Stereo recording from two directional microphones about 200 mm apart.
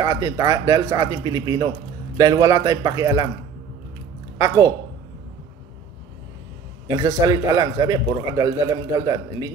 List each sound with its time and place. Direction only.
0.0 s a man's voice: 15° right (ahead or behind)
4.4 s a man's voice: 15° right (ahead or behind)
6.9 s a man's voice: 15° right (ahead or behind)